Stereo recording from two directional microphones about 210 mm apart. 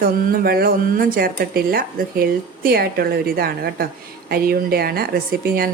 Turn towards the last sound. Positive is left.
turn(degrees=-45)  # may be behind; listen again after turning